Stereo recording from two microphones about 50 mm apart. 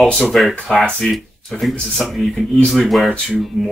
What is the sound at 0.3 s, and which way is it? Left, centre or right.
Speech, centre.